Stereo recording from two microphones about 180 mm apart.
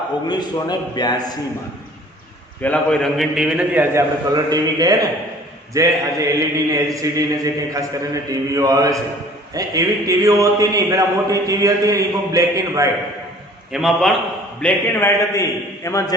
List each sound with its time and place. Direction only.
0.3 s a man's voice: 25° left (ahead or behind)
2.6 s a man's voice: 10° left (ahead or behind); by 12.9 s 20° right (ahead or behind)
13.7 s a man's voice: centre (ahead or behind)
14.6 s a man's voice: 15° left (ahead or behind)